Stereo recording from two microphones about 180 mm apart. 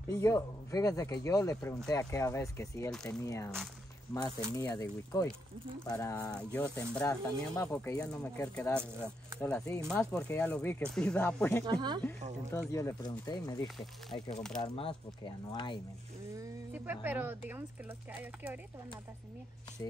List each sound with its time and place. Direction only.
0.1 s speech: 15° left (ahead or behind)
11.6 s speech: 25° right (ahead or behind)
12.5 s speech: 15° left (ahead or behind)
14.3 s speech: 5° left (ahead or behind)
14.6 s speech: 30° left (ahead or behind)
16.3 s speech: 10° right (ahead or behind)